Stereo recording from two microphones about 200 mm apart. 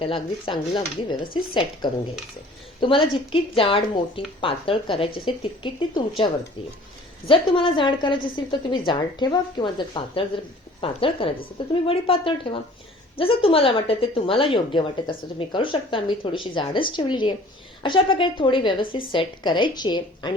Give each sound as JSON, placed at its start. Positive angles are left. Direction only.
{"t": 0.0, "sound": "speech", "side_deg": 25}